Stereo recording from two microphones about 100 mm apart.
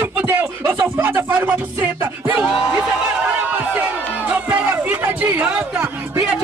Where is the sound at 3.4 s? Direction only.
15° right (ahead or behind).